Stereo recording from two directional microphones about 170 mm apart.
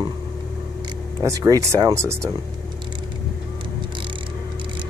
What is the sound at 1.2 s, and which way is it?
Speech, 20° right (ahead or behind).